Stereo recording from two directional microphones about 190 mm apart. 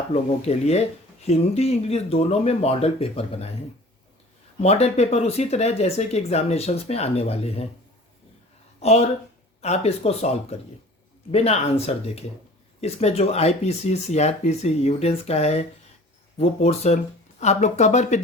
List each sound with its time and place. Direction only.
0.1 s speech: 35° left (ahead or behind)
4.6 s speech: 35° left (ahead or behind)
8.8 s speech: 35° left (ahead or behind)